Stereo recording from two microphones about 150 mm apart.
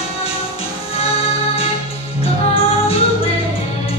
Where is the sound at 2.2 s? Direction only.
40° left (ahead or behind).